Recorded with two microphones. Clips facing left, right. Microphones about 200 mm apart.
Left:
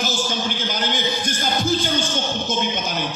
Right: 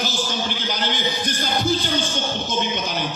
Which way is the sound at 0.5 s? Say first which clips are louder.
Left 1 dB; 45° left (ahead or behind).